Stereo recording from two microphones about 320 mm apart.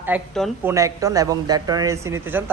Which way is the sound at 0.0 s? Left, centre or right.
Centre.